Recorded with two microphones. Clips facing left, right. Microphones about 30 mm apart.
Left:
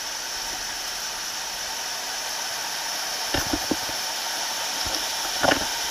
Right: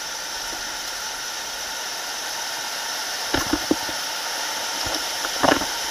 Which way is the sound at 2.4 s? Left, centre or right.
Right.